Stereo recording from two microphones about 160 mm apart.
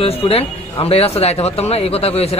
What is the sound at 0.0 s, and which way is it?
Speech, 40° left (ahead or behind).